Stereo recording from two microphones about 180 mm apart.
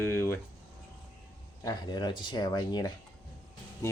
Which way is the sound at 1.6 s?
25° left (ahead or behind).